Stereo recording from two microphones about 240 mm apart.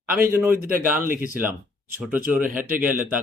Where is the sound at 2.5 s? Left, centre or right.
Right.